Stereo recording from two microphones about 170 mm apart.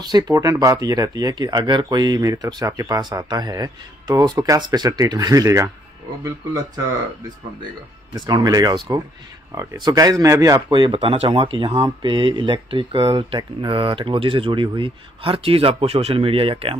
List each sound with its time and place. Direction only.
0.0 s speech: 25° right (ahead or behind)
8.3 s speech: 20° right (ahead or behind)